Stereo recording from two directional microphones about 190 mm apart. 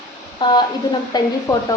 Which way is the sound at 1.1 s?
20° left (ahead or behind).